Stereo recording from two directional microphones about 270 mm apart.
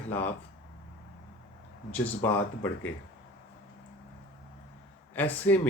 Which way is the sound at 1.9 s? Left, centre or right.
Centre.